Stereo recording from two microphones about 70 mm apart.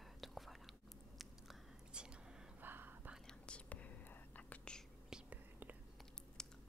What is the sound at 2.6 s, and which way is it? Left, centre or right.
Whispering, right.